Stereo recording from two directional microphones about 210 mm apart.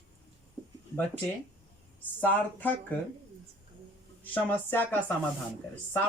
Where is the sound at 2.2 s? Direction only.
10° left (ahead or behind).